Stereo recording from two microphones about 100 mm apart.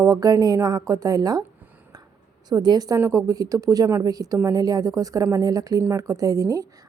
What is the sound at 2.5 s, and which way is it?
A woman's voice, 45° right (ahead or behind).